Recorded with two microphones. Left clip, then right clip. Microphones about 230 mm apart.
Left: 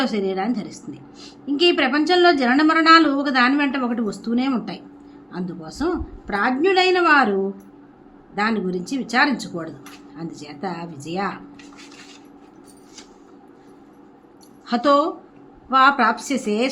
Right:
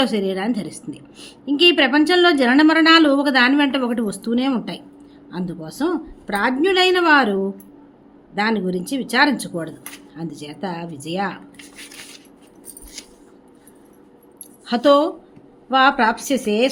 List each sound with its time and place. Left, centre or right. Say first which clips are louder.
0.0 s a woman's voice: right 2 dB; centre
8.4 s a woman's voice: right 2 dB; centre
14.7 s a woman's voice: right 2 dB; centre